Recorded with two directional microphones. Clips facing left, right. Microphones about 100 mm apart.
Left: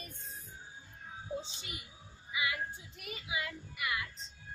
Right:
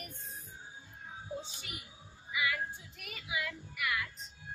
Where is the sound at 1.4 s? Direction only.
25° left (ahead or behind).